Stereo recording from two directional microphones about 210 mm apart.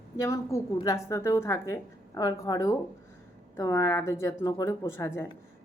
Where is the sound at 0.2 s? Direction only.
15° left (ahead or behind).